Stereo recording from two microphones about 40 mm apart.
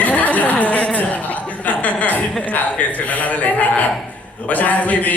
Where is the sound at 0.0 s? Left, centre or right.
Left.